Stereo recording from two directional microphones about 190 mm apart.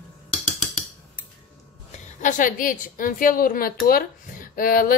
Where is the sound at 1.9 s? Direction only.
40° left (ahead or behind).